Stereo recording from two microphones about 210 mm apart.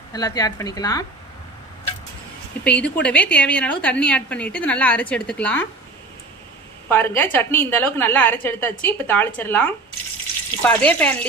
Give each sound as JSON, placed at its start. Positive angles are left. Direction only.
{"t": 0.1, "sound": "a woman's voice", "side_deg": 20}
{"t": 2.6, "sound": "a woman's voice", "side_deg": 5}
{"t": 6.8, "sound": "a woman's voice", "side_deg": 10}